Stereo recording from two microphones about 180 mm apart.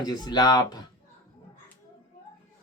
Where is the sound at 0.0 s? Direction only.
25° left (ahead or behind).